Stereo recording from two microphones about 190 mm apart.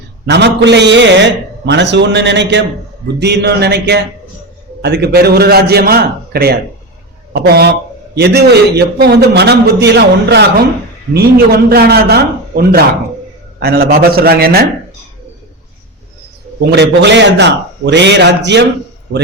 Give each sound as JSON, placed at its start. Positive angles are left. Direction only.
{"t": 0.3, "sound": "a man's voice", "side_deg": -65}
{"t": 16.6, "sound": "a man's voice", "side_deg": -60}